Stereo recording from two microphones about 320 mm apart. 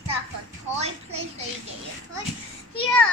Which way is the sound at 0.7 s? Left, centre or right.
Centre.